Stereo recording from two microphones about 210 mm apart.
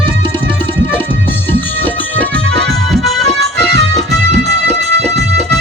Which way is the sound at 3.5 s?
55° right (ahead or behind).